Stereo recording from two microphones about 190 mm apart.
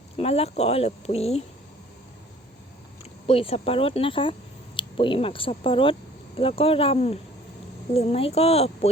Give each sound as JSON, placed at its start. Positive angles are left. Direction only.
{"t": 0.2, "sound": "speech", "side_deg": 30}
{"t": 3.2, "sound": "speech", "side_deg": 30}